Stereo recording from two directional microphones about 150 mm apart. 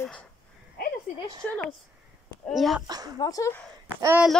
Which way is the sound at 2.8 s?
25° right (ahead or behind).